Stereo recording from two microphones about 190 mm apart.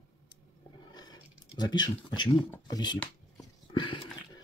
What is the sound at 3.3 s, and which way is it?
Dog, 25° left (ahead or behind).